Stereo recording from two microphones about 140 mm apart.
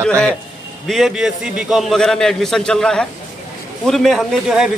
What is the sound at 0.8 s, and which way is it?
A man's voice, centre (ahead or behind).